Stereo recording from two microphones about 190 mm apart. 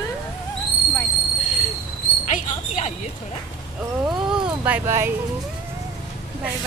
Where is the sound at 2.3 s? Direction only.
40° left (ahead or behind).